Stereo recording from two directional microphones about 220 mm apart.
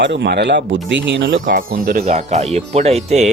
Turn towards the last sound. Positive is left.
turn(degrees=-30)  # may be behind; listen again after turning